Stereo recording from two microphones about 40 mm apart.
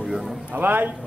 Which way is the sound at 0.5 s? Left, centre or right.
Right.